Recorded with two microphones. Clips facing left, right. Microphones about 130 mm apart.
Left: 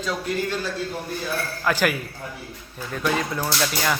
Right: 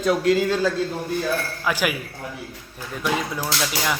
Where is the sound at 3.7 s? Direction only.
10° right (ahead or behind).